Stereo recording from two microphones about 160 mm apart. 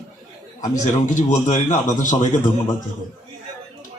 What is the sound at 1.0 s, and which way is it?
A man's voice, 50° left (ahead or behind).